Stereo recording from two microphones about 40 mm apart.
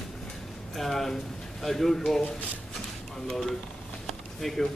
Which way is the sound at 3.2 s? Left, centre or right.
Centre.